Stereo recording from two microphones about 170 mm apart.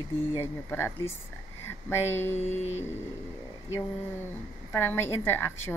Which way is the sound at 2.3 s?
40° left (ahead or behind).